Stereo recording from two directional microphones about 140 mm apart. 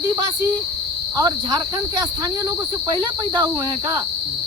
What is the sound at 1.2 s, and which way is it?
Cricket, 30° right (ahead or behind).